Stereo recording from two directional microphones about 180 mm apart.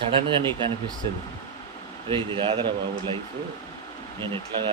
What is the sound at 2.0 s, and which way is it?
Speech, 30° right (ahead or behind).